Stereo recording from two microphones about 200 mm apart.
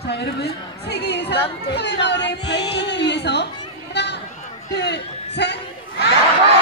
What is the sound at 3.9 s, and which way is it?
Chatter, 60° left (ahead or behind).